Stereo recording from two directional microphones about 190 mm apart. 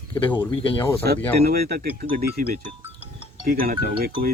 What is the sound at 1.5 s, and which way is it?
Speech, 55° right (ahead or behind).